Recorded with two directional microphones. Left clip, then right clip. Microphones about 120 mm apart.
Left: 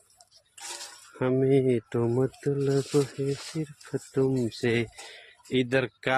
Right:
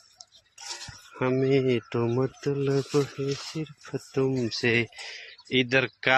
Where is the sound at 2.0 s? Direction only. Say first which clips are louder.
Even; 15° left (ahead or behind).